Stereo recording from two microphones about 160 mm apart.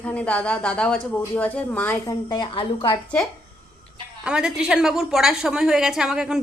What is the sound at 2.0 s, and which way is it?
Speech, 25° left (ahead or behind).